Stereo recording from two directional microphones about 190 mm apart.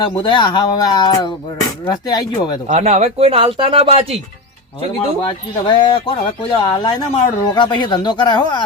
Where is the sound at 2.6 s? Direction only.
35° right (ahead or behind).